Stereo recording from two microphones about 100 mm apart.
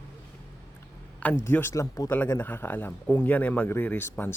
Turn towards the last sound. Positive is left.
turn(degrees=20)  # may be behind; listen again after turning